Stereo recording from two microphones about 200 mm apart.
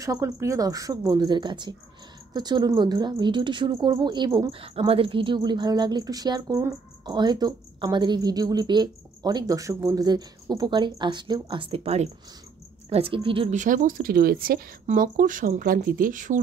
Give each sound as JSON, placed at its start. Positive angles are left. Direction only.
{"t": 0.0, "sound": "a woman's voice", "side_deg": -15}